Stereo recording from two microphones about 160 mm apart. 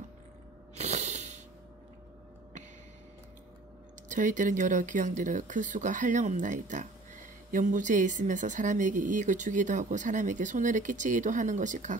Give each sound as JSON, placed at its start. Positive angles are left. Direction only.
{"t": 0.7, "sound": "snort", "side_deg": -45}
{"t": 4.1, "sound": "speech", "side_deg": -55}